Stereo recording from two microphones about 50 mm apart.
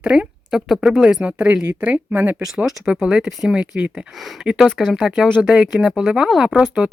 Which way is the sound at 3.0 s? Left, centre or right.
Centre.